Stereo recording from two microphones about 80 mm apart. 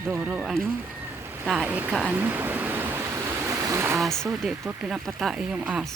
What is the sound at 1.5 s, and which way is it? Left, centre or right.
Speech, centre.